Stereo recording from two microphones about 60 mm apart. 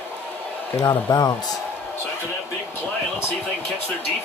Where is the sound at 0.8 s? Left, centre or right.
Left.